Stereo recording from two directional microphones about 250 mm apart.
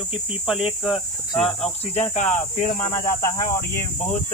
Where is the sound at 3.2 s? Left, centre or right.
Centre.